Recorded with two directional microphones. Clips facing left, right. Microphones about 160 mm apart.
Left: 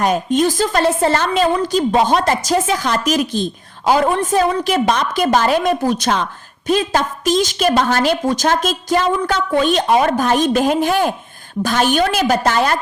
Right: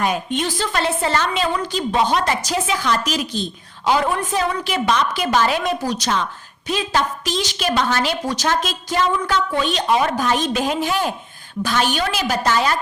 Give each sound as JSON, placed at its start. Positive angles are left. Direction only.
{"t": 0.0, "sound": "a woman's voice", "side_deg": 40}